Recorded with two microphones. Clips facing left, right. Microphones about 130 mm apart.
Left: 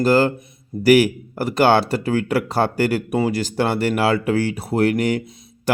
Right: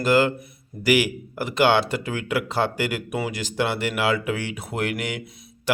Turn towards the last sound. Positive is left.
turn(degrees=40)  # may be behind; listen again after turning